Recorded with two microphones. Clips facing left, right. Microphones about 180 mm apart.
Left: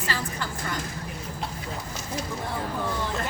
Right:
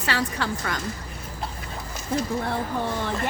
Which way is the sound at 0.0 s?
70° right (ahead or behind).